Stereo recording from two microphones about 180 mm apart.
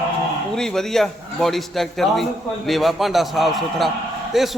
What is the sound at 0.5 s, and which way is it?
A man's voice, 5° left (ahead or behind).